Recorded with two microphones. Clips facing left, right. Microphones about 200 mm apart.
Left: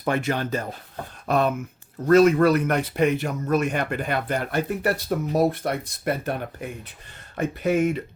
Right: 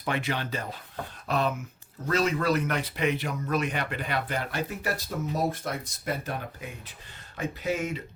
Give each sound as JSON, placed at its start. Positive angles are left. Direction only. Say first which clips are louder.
{"t": 0.0, "sound": "speech", "louder": "left 6 dB", "side_deg": 45}
{"t": 2.0, "sound": "speech", "louder": "left 10 dB", "side_deg": 55}